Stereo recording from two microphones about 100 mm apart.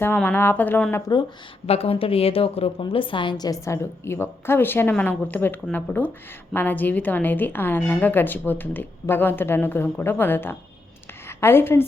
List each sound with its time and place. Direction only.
0.3 s a woman's voice: 20° left (ahead or behind)
1.6 s speech: 85° left
2.9 s a woman's voice: 60° left (ahead or behind); by 11.9 s 25° left (ahead or behind)